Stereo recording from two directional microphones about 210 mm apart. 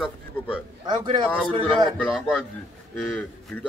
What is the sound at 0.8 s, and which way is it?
Speech, 20° right (ahead or behind).